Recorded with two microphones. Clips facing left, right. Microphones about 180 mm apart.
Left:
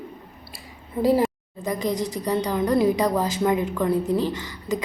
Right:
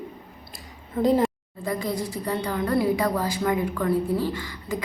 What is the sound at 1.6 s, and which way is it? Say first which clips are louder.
A woman's voice: left 2 dB; 20° left (ahead or behind).